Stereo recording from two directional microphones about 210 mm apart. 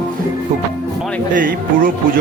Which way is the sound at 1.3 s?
40° right (ahead or behind).